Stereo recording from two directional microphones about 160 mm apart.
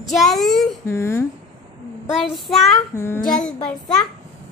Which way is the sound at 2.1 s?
Centre (ahead or behind).